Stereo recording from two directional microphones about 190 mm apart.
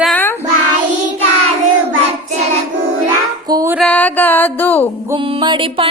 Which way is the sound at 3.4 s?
20° right (ahead or behind).